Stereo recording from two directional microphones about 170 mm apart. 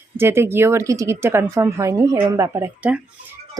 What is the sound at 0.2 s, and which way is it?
Speech, 15° right (ahead or behind).